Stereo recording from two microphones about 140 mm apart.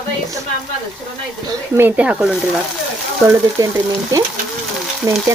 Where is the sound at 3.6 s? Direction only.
25° right (ahead or behind).